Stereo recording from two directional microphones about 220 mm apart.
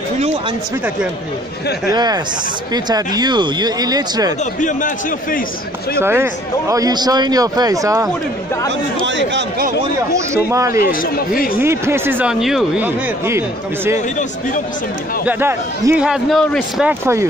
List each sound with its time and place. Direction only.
1.9 s a man's voice: 20° right (ahead or behind)
4.6 s a man's voice: 35° left (ahead or behind)
5.9 s a man's voice: 10° right (ahead or behind)
8.6 s speech: 55° right (ahead or behind)
10.3 s a man's voice: 15° right (ahead or behind)
10.8 s a man's voice: 40° left (ahead or behind)
11.6 s a man's voice: 10° right (ahead or behind)
15.2 s a man's voice: 10° right (ahead or behind)
17.0 s a man's voice: 10° right (ahead or behind)